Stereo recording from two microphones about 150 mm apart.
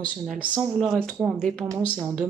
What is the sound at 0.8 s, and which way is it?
Speech, centre (ahead or behind).